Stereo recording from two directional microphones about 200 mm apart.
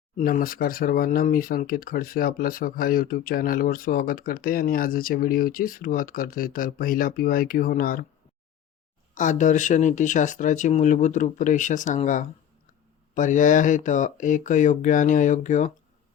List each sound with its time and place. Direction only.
0.2 s speech: 45° left (ahead or behind)
9.1 s speech: 40° left (ahead or behind)